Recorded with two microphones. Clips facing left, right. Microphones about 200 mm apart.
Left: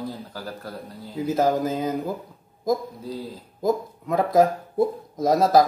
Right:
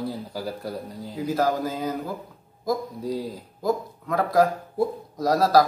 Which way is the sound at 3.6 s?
20° left (ahead or behind).